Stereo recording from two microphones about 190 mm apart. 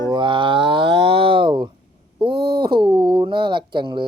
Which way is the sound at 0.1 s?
25° right (ahead or behind).